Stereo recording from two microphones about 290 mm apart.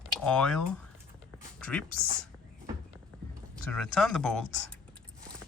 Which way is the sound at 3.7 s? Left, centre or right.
Centre.